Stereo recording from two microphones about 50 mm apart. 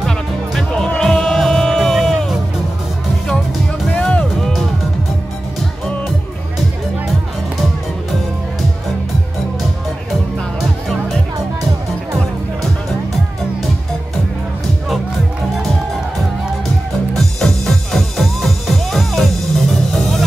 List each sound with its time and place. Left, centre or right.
0.8 s music: centre
1.8 s music: centre
4.4 s music: centre
10.6 s music: centre
17.1 s music: centre